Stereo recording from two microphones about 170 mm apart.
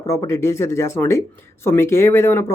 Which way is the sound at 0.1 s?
15° left (ahead or behind).